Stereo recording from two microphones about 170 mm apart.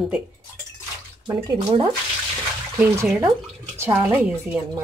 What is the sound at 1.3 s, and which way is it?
Speech, 30° right (ahead or behind).